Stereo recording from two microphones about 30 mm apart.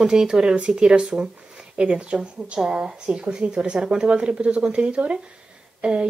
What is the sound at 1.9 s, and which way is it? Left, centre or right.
Speech, right.